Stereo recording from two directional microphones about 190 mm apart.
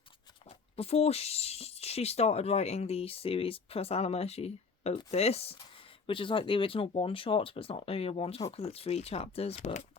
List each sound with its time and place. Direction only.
0.4 s speech: 35° left (ahead or behind)